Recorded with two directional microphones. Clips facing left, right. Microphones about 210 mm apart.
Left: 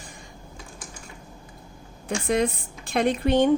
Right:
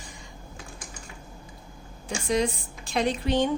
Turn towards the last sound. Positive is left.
turn(degrees=55)  # may be behind; listen again after turning